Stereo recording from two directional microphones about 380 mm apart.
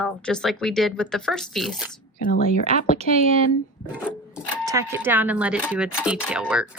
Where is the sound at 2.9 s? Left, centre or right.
Centre.